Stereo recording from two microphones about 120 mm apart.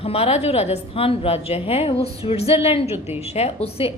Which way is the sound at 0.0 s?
55° left (ahead or behind).